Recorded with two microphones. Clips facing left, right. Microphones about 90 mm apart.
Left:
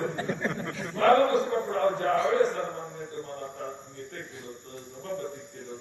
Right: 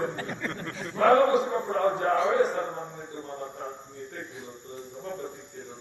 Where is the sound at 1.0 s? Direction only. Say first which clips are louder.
Right 1 dB; 15° right (ahead or behind).